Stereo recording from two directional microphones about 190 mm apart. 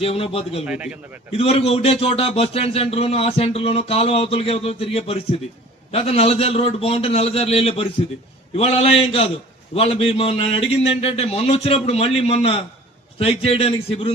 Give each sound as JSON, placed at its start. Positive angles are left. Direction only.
{"t": 0.0, "sound": "speech", "side_deg": 30}
{"t": 0.6, "sound": "a man's voice", "side_deg": -5}
{"t": 1.3, "sound": "a man's voice", "side_deg": 30}